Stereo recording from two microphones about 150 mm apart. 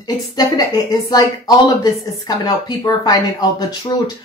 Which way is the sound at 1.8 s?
25° left (ahead or behind).